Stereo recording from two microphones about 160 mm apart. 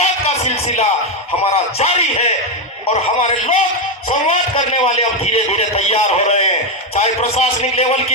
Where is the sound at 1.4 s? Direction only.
40° left (ahead or behind).